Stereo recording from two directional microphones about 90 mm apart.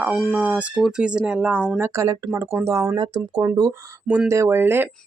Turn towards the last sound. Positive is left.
turn(degrees=-25)  # may be behind; listen again after turning